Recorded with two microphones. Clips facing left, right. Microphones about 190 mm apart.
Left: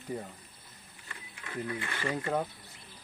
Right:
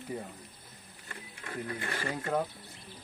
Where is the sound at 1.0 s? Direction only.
40° right (ahead or behind).